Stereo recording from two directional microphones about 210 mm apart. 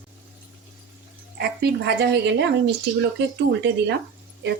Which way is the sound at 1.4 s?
50° right (ahead or behind).